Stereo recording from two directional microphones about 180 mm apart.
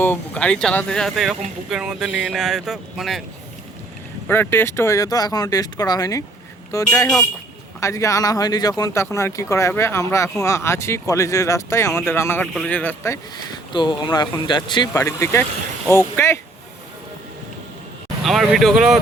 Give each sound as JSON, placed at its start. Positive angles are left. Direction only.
{"t": 0.0, "sound": "speech", "side_deg": 10}
{"t": 4.3, "sound": "speech", "side_deg": 10}
{"t": 18.2, "sound": "speech", "side_deg": 0}